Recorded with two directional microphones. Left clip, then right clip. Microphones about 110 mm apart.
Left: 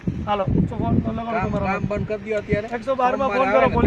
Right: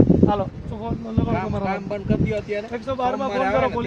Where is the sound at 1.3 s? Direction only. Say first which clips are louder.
Left 2 dB; 20° right (ahead or behind).